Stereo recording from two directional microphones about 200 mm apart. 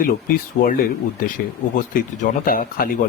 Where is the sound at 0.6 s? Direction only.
45° left (ahead or behind).